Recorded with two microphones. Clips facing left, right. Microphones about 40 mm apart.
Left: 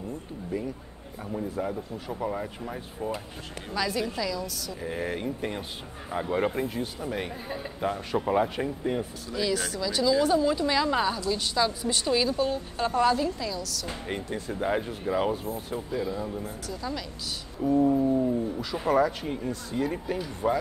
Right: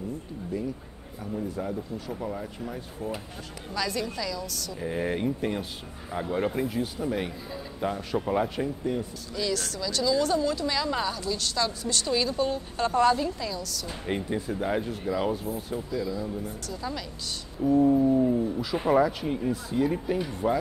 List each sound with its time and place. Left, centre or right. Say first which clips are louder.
1.3 s a woman's voice: left 1 dB; centre
6.0 s a woman's voice: left 1 dB; centre
8.9 s speech: left 1 dB; left
9.3 s a woman's voice: left 2 dB; centre
14.5 s a woman's voice: left 2 dB; centre
15.9 s speech: left 1 dB; left
16.6 s a woman's voice: even; centre